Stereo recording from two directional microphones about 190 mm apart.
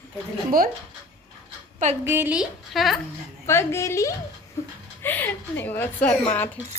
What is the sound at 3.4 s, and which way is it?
Speech, 15° left (ahead or behind).